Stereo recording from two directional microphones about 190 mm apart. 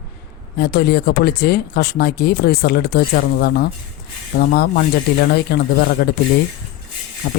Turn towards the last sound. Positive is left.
turn(degrees=55)  # may be behind; listen again after turning